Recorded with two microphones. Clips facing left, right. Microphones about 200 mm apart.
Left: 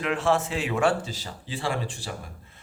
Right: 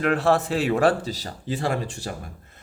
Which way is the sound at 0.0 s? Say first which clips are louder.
Right 4 dB; 40° right (ahead or behind).